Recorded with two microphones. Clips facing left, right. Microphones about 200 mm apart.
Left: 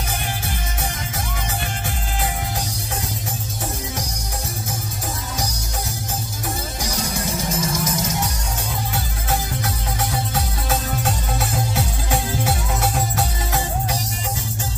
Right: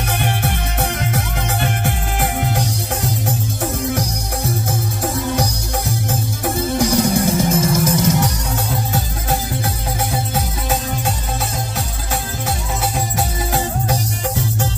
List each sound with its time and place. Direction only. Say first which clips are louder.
0.2 s music: right 7 dB; 65° right (ahead or behind)
6.8 s music: right 13 dB; 60° right (ahead or behind)